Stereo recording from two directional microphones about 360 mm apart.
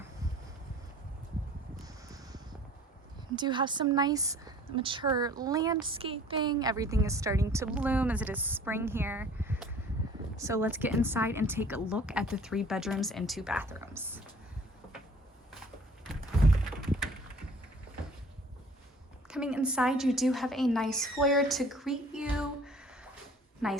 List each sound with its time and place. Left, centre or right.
1.8 s a sound: centre
3.3 s a woman's voice: centre
19.3 s a woman's voice: centre